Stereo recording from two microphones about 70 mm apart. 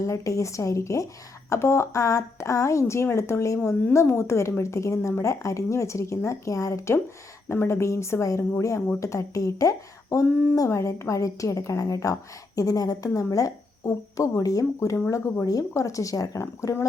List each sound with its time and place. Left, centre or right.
0.0 s a woman's voice: left
10.7 s a woman's voice: left
14.8 s a woman's voice: left
15.4 s a woman's voice: left